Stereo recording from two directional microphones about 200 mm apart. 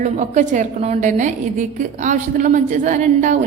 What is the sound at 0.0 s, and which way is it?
A woman's voice, 35° right (ahead or behind).